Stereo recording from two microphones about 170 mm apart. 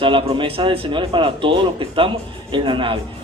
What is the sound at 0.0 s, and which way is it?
A man's voice, 30° right (ahead or behind).